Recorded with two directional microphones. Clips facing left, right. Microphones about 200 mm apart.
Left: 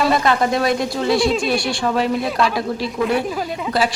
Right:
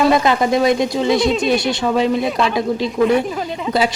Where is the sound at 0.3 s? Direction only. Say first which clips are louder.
Right 3 dB; 20° right (ahead or behind).